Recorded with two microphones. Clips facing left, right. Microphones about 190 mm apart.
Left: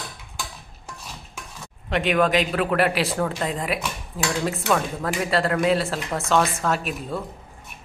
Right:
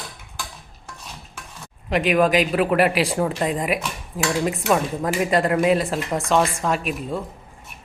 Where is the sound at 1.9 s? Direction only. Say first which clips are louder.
Right 2 dB; 5° right (ahead or behind).